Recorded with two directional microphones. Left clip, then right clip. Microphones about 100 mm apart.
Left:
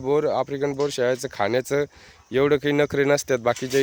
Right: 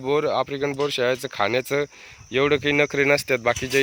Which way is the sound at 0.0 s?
40° left (ahead or behind).